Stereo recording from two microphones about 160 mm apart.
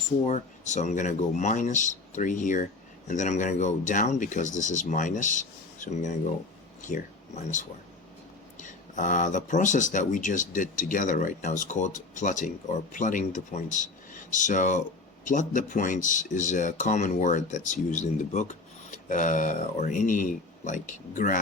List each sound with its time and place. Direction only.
0.3 s speech: 50° left (ahead or behind)